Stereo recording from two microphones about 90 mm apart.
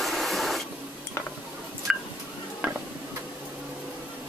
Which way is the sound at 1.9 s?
5° right (ahead or behind).